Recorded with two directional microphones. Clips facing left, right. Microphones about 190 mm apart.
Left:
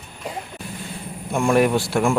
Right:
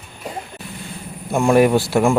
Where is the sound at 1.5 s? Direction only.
5° right (ahead or behind).